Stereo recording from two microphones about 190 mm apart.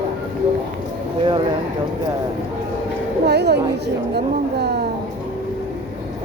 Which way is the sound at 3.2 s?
60° right (ahead or behind).